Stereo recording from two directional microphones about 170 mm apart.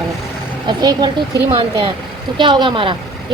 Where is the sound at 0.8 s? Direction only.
25° right (ahead or behind).